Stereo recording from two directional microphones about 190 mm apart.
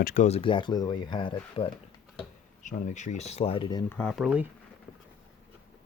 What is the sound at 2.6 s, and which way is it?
Speech, 40° left (ahead or behind).